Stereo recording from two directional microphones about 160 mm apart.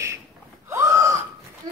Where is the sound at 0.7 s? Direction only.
20° right (ahead or behind).